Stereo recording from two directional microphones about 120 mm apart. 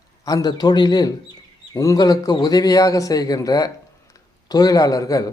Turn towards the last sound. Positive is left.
turn(degrees=30)  # may be behind; listen again after turning